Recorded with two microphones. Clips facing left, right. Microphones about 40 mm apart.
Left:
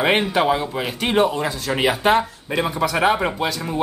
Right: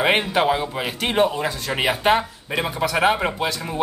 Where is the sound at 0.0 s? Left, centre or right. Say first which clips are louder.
Left 1 dB; centre.